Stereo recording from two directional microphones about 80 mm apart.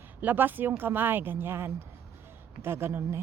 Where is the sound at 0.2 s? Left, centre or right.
Right.